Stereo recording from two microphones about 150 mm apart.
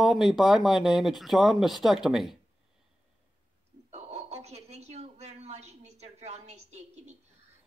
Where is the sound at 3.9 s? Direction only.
45° right (ahead or behind).